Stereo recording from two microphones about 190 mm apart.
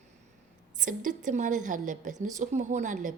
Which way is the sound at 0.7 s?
40° right (ahead or behind).